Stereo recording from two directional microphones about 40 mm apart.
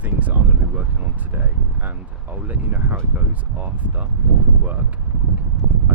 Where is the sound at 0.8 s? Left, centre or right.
Right.